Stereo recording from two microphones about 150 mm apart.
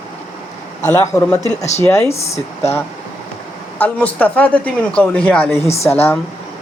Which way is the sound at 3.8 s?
10° left (ahead or behind).